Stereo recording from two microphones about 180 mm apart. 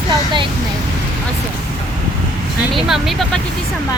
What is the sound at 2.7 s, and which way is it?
Speech, centre (ahead or behind).